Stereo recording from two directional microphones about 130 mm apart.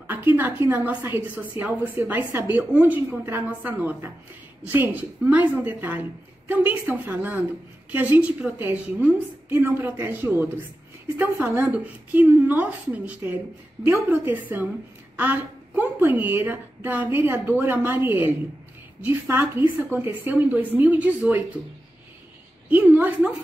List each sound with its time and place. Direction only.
0.0 s a sound: 15° right (ahead or behind)
0.7 s a woman's voice: 15° right (ahead or behind)
22.7 s a woman's voice: 10° right (ahead or behind)